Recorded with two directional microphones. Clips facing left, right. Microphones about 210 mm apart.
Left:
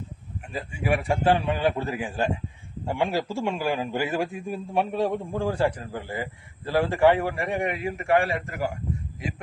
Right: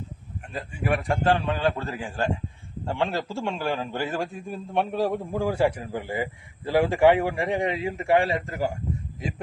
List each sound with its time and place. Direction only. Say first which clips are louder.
0.5 s a man's voice: left 1 dB; 10° left (ahead or behind); by 8.6 s 20° right (ahead or behind)